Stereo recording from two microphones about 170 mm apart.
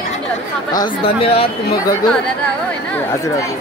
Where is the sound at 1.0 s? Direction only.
35° left (ahead or behind).